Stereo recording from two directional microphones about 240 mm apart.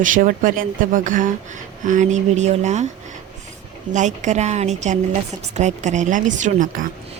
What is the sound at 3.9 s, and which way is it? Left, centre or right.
Speech, right.